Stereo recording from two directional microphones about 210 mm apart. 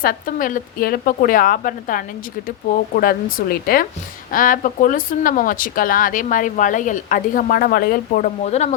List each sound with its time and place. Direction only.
0.0 s a woman's voice: 45° left (ahead or behind)